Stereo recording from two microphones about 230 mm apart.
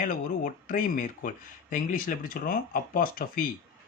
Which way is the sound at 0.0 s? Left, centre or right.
Left.